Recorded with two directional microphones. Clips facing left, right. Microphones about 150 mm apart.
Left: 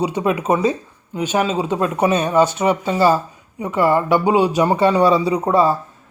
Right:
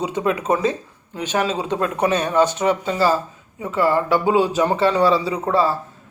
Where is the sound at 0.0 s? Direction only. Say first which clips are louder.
Left 2 dB; 10° left (ahead or behind).